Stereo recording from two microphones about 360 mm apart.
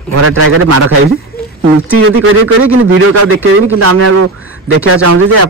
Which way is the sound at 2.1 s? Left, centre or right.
Right.